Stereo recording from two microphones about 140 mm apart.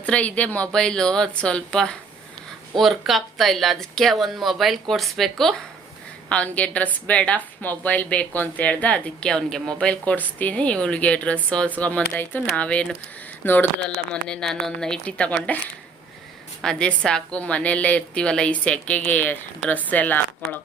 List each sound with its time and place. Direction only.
0.0 s a woman's voice: 10° left (ahead or behind)
16.6 s a woman's voice: 5° left (ahead or behind)